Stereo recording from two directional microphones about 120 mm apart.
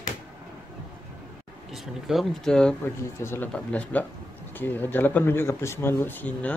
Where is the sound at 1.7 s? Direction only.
Centre (ahead or behind).